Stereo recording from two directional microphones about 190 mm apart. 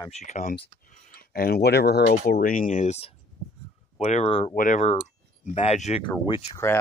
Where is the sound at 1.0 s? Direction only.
50° left (ahead or behind); by 4.6 s 30° left (ahead or behind).